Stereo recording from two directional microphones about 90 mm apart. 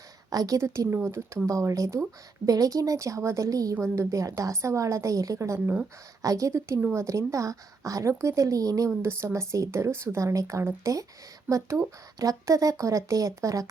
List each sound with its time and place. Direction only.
0.3 s speech: 40° right (ahead or behind)